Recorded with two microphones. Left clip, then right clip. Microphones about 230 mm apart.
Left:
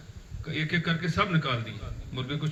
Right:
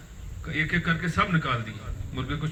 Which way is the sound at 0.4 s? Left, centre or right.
Left.